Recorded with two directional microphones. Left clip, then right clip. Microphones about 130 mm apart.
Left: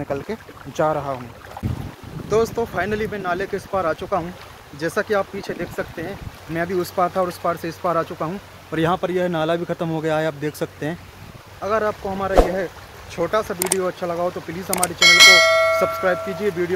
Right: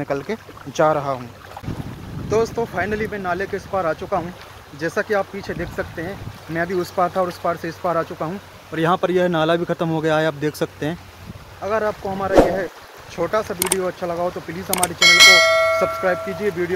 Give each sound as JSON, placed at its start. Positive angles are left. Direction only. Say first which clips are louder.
{"t": 0.0, "sound": "speech", "louder": "right 2 dB", "side_deg": 0}
{"t": 2.2, "sound": "speech", "louder": "even", "side_deg": 25}
{"t": 8.9, "sound": "speech", "louder": "right 3 dB", "side_deg": -25}
{"t": 11.6, "sound": "speech", "louder": "even", "side_deg": 25}
{"t": 14.7, "sound": "speech", "louder": "even", "side_deg": 0}
{"t": 16.0, "sound": "speech", "louder": "even", "side_deg": 20}